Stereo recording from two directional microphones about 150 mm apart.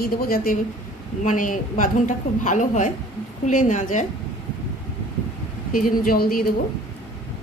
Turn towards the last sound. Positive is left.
turn(degrees=80)